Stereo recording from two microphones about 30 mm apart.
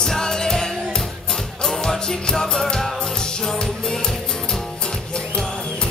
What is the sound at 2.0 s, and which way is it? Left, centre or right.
Music, left.